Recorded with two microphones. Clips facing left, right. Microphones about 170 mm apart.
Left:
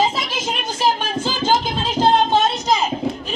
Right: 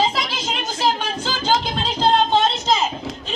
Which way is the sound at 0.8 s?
20° left (ahead or behind).